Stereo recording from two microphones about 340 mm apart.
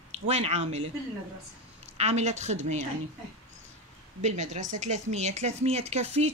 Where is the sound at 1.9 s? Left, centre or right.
Centre.